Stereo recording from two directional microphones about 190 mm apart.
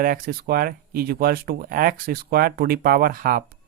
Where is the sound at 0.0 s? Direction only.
50° right (ahead or behind).